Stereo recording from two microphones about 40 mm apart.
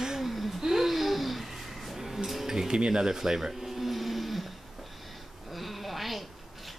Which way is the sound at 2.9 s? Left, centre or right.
Centre.